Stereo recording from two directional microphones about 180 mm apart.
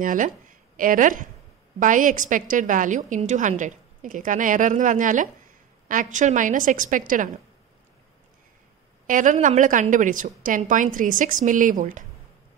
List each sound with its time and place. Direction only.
0.0 s a woman's voice: 45° right (ahead or behind)
9.0 s a woman's voice: 45° right (ahead or behind)